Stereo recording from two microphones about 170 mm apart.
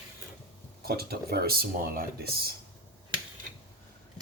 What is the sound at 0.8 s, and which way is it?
Speech, 65° right (ahead or behind).